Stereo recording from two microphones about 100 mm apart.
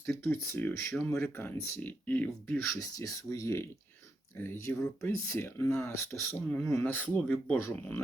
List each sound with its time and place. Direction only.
0.0 s speech: 20° left (ahead or behind)
2.7 s speech: 35° left (ahead or behind); by 7.6 s 15° left (ahead or behind)
7.6 s speech: 25° left (ahead or behind)